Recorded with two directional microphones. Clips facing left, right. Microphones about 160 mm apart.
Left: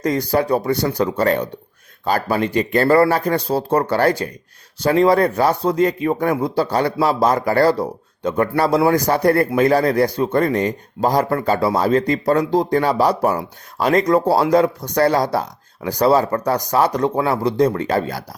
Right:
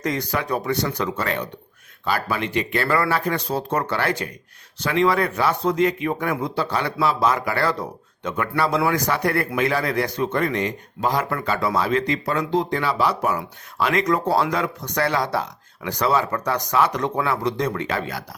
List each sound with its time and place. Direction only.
0.0 s speech: 35° left (ahead or behind)